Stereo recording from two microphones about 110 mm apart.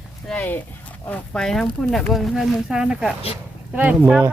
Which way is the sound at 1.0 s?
10° left (ahead or behind).